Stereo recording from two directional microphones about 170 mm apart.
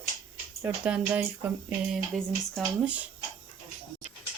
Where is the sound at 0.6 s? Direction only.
10° right (ahead or behind).